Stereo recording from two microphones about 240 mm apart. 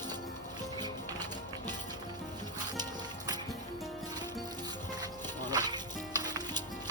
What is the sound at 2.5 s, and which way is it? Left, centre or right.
Music, centre.